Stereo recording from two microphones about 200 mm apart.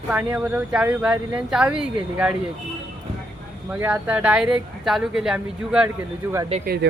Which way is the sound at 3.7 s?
10° right (ahead or behind).